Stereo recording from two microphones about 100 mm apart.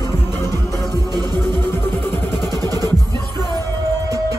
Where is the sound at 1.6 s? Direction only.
20° left (ahead or behind).